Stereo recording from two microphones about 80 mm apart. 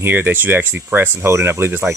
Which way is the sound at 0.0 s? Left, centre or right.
Right.